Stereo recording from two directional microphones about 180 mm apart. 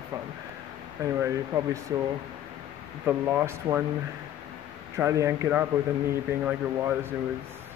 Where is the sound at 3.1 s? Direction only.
10° right (ahead or behind).